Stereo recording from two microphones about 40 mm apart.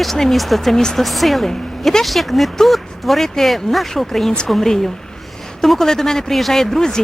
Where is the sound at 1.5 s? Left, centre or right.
Centre.